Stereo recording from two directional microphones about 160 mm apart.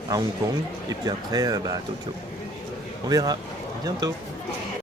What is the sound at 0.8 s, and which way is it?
Speech, 25° right (ahead or behind).